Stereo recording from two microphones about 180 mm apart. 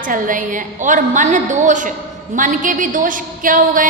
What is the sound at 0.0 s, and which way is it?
A woman's voice, 45° right (ahead or behind).